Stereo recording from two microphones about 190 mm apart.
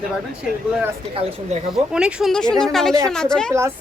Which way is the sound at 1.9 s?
5° right (ahead or behind).